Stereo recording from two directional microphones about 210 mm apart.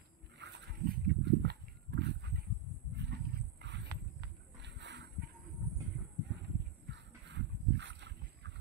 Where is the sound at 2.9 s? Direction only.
55° right (ahead or behind).